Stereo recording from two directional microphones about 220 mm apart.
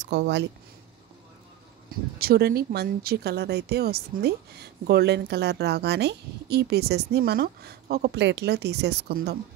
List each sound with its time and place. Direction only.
0.0 s speech: 50° right (ahead or behind)
2.1 s speech: 45° right (ahead or behind)